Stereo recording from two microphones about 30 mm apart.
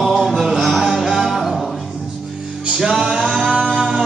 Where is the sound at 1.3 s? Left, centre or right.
Centre.